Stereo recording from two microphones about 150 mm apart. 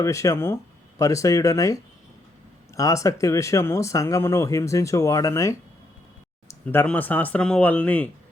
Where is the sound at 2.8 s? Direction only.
20° left (ahead or behind).